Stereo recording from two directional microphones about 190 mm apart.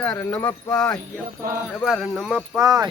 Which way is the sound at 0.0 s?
5° left (ahead or behind).